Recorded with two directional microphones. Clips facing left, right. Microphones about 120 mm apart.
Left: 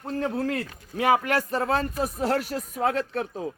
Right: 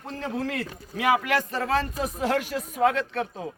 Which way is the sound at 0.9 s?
40° left (ahead or behind).